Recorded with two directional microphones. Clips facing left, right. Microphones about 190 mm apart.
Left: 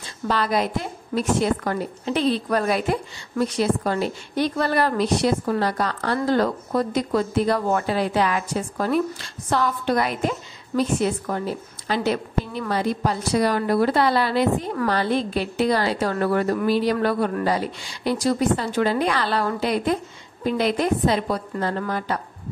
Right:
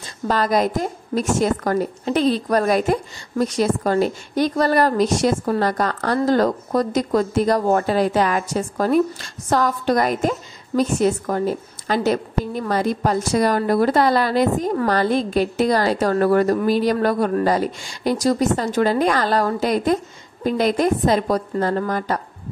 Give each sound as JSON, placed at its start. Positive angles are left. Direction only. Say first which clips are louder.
{"t": 0.3, "sound": "a woman's voice", "louder": "right 4 dB", "side_deg": -45}